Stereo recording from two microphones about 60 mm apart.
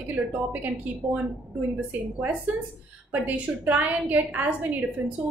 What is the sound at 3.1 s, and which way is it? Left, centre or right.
A woman's voice, right.